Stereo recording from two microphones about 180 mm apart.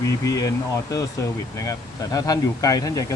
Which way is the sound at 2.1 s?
20° left (ahead or behind).